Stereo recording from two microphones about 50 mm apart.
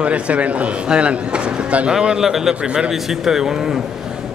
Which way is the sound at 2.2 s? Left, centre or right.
Centre.